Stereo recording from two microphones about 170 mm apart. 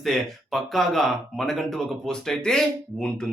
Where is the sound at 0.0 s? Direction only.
Centre (ahead or behind).